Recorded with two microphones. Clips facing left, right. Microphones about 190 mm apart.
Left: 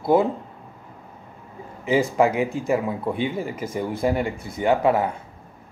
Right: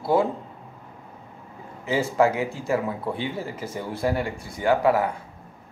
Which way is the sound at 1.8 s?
15° left (ahead or behind).